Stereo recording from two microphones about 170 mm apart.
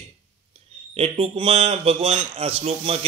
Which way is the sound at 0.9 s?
35° right (ahead or behind).